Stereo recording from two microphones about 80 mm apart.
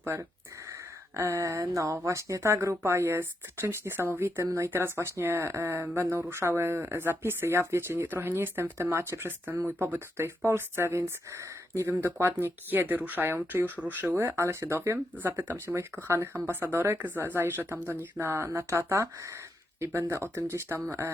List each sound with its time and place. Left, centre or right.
0.0 s speech: right
14.3 s speech: right